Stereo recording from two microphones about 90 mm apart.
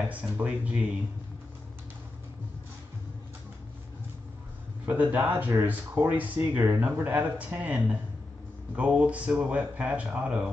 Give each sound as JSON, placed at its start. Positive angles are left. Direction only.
{"t": 0.1, "sound": "speech", "side_deg": -15}
{"t": 4.8, "sound": "speech", "side_deg": -20}